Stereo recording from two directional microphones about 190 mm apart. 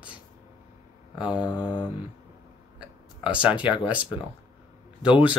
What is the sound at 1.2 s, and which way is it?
Speech, 5° right (ahead or behind).